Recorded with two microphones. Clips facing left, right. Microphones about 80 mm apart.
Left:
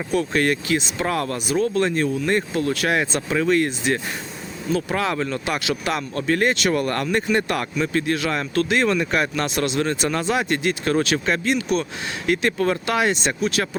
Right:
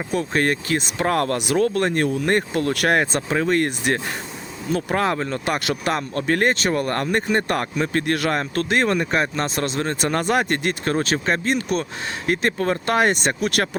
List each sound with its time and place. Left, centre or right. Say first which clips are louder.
0.1 s speech: left 1 dB; right
1.4 s speech: right 1 dB; right
8.4 s speech: even; right